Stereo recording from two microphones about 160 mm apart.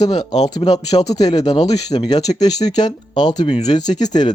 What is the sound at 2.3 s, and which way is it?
Speech, 25° left (ahead or behind).